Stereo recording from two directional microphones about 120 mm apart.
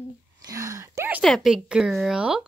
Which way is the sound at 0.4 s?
30° right (ahead or behind).